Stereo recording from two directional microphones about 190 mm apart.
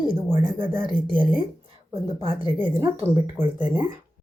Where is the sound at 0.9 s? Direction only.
25° left (ahead or behind).